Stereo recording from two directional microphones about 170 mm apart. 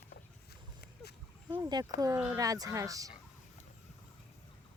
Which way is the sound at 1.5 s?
20° right (ahead or behind).